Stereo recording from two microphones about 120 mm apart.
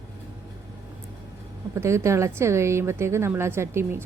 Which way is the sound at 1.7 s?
25° right (ahead or behind).